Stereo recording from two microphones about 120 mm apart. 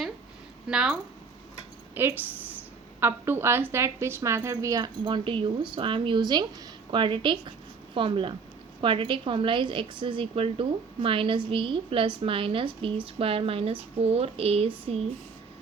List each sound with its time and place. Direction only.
0.7 s speech: 5° right (ahead or behind)
2.0 s a woman's voice: 15° right (ahead or behind); by 14.7 s 55° right (ahead or behind)